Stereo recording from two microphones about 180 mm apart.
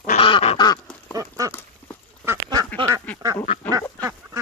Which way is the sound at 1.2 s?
20° right (ahead or behind).